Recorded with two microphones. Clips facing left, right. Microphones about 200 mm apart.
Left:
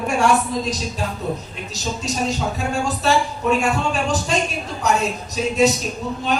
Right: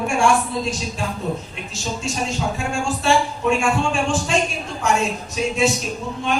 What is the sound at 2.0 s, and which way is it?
Speech, 40° left (ahead or behind).